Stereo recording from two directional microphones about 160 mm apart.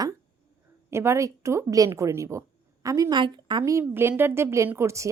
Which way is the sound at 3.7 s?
15° right (ahead or behind).